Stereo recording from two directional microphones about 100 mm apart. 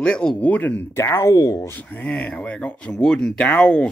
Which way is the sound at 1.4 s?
40° left (ahead or behind).